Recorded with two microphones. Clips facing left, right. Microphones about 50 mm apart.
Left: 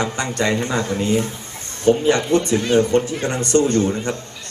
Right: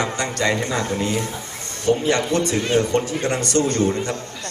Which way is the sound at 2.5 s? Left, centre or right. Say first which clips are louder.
Left 3 dB; right.